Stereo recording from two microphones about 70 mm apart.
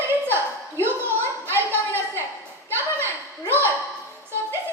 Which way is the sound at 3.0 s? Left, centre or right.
Right.